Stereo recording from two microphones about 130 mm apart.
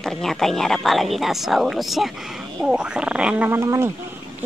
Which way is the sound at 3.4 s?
20° right (ahead or behind).